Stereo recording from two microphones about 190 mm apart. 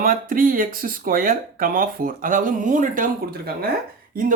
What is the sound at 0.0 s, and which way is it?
Speech, 45° right (ahead or behind).